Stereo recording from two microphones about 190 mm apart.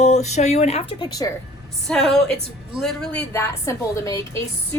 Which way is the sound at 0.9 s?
20° left (ahead or behind).